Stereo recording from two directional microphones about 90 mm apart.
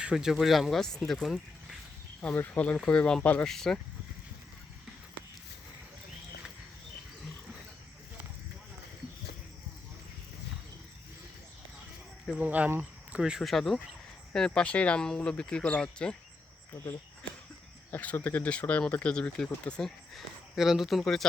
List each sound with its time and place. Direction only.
0.0 s speech: 10° right (ahead or behind)
2.2 s speech: 20° left (ahead or behind)
12.4 s speech: 15° right (ahead or behind); by 16.1 s 10° left (ahead or behind)
17.9 s speech: 15° left (ahead or behind)
20.1 s speech: 5° right (ahead or behind)